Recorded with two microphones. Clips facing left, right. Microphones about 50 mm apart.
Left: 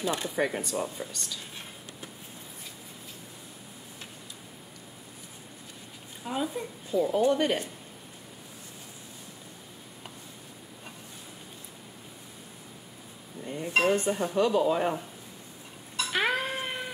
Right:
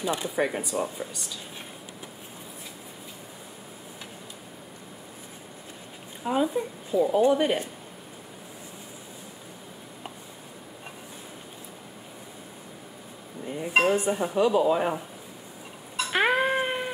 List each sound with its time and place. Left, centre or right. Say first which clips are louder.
0.0 s speech: right 2 dB; centre
6.2 s speech: right 6 dB; centre
13.4 s speech: right 3 dB; centre
16.0 s cat: right 5 dB; right